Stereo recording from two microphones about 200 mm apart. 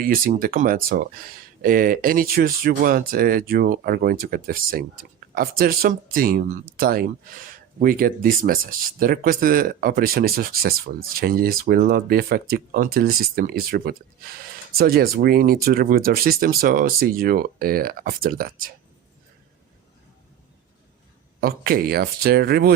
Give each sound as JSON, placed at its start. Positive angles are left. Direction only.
{"t": 0.0, "sound": "speech", "side_deg": -45}
{"t": 21.4, "sound": "speech", "side_deg": -50}